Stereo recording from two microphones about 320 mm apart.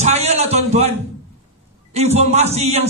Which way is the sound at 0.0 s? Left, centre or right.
Centre.